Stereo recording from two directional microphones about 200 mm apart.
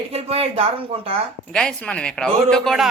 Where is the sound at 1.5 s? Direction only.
5° left (ahead or behind).